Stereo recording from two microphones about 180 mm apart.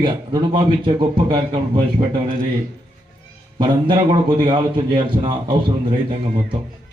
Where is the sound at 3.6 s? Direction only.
25° right (ahead or behind).